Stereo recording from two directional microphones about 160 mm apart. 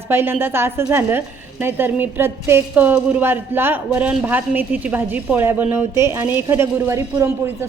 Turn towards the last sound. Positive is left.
turn(degrees=-15)  # may be behind; listen again after turning